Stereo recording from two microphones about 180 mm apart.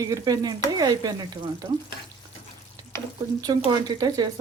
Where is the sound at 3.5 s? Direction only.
25° right (ahead or behind).